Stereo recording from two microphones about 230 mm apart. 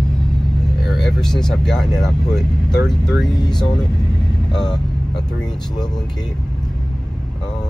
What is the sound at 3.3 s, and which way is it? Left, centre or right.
Speech, centre.